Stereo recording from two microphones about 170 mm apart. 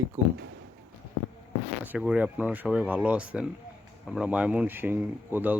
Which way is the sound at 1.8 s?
5° right (ahead or behind).